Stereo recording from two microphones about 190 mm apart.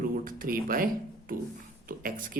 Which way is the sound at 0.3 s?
50° right (ahead or behind).